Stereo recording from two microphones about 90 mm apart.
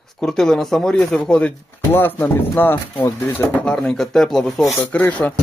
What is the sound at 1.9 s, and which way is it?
Speech, 25° left (ahead or behind).